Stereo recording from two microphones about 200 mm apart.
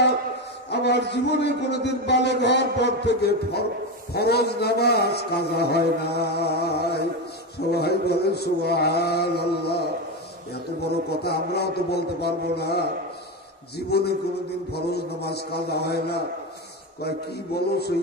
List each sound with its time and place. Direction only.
0.7 s a man's voice: 55° left (ahead or behind)
11.1 s speech: 55° left (ahead or behind)